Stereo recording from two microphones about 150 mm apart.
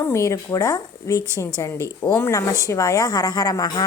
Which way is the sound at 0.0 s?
20° left (ahead or behind).